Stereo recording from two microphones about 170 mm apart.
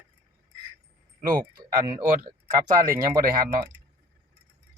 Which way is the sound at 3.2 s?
60° right (ahead or behind).